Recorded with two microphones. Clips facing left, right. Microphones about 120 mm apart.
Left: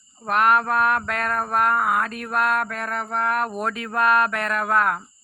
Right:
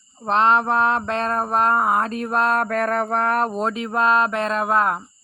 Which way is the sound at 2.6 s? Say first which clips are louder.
Right 8 dB; 45° right (ahead or behind).